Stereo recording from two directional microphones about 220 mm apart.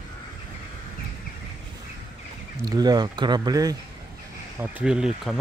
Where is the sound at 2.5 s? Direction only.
15° right (ahead or behind).